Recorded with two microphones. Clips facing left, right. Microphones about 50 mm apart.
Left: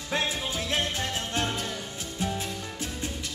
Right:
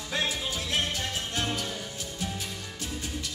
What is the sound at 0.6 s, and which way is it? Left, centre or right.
Music, left.